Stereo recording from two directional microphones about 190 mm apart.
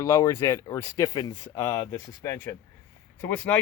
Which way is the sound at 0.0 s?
15° left (ahead or behind).